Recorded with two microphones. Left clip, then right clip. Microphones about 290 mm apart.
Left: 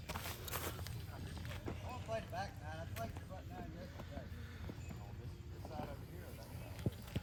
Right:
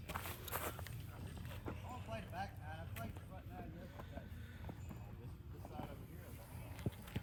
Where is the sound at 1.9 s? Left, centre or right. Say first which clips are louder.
Left 8 dB; left.